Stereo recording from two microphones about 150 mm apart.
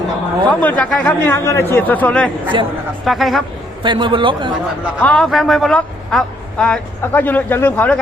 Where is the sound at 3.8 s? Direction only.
30° right (ahead or behind).